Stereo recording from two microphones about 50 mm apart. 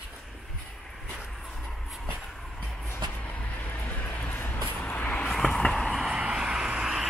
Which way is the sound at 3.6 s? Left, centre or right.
Left.